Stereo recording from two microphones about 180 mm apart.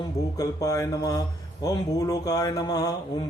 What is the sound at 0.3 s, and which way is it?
Speech, 20° left (ahead or behind).